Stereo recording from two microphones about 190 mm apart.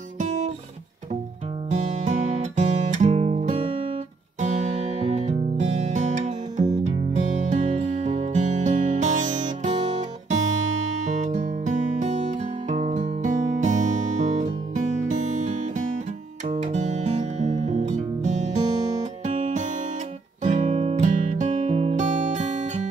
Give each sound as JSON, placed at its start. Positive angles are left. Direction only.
{"t": 0.2, "sound": "guitar", "side_deg": -40}
{"t": 1.7, "sound": "music", "side_deg": -35}
{"t": 5.0, "sound": "music", "side_deg": -35}